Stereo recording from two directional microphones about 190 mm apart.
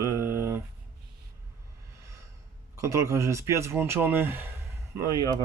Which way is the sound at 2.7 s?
15° right (ahead or behind).